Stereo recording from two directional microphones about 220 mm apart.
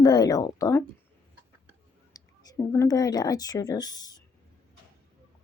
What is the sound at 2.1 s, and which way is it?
A woman's voice, 15° left (ahead or behind).